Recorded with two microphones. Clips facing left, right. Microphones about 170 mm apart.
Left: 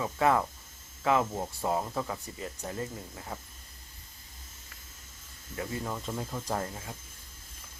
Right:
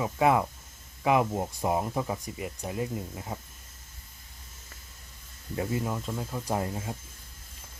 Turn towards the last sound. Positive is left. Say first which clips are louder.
# right 3 dB
turn(degrees=-20)  # may be behind; listen again after turning